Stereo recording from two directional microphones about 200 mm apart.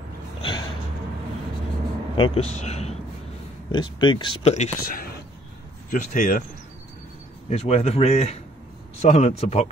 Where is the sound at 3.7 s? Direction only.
25° left (ahead or behind).